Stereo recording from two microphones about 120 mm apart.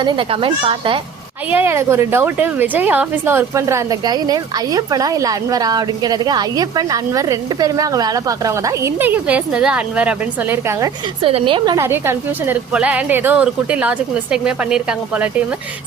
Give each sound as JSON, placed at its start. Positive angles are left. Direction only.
{"t": 0.0, "sound": "speech", "side_deg": -45}
{"t": 1.5, "sound": "a woman's voice", "side_deg": -20}
{"t": 9.0, "sound": "a woman's voice", "side_deg": -15}
{"t": 11.2, "sound": "speech", "side_deg": -50}
{"t": 11.8, "sound": "a woman's voice", "side_deg": -20}
{"t": 12.7, "sound": "a woman's voice", "side_deg": -10}